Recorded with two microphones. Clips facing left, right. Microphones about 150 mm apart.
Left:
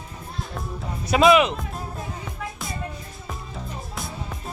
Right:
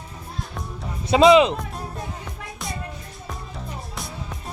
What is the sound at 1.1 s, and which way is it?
Speech, 25° right (ahead or behind).